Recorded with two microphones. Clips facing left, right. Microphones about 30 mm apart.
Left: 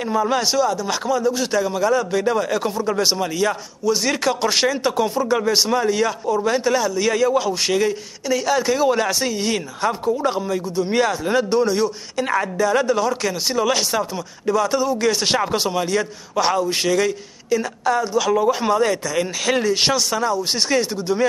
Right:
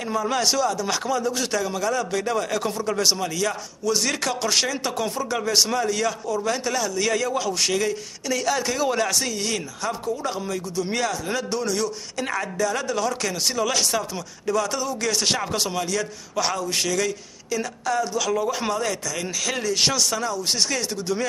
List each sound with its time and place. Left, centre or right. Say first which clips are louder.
0.0 s a man's voice: left 4 dB; centre